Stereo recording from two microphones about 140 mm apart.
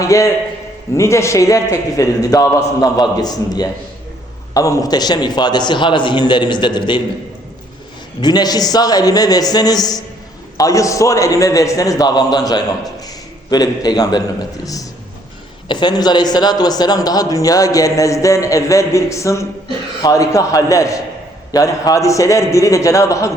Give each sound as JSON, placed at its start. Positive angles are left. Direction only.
{"t": 0.0, "sound": "a man's voice", "side_deg": 20}
{"t": 8.2, "sound": "a man's voice", "side_deg": 30}